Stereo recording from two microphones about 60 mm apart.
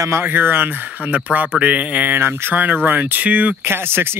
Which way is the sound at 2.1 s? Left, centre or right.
Right.